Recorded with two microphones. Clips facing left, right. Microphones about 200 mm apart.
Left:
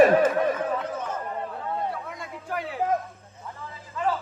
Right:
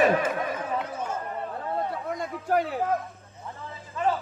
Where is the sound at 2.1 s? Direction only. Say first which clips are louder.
Right 7 dB; 40° right (ahead or behind).